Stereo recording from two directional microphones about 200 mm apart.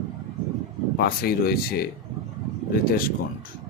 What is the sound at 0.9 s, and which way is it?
Speech, 50° left (ahead or behind).